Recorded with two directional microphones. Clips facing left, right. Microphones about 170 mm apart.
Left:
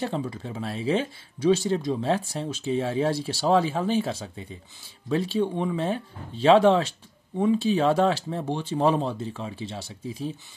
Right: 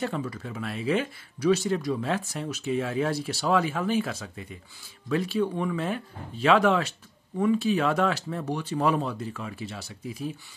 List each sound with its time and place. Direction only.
0.0 s speech: 30° left (ahead or behind)